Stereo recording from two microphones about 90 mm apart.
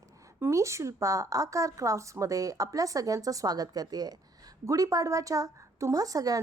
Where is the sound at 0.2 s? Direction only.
30° right (ahead or behind).